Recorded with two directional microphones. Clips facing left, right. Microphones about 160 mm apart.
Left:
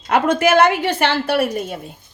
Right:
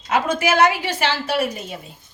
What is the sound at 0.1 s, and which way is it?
A woman's voice, 55° left (ahead or behind).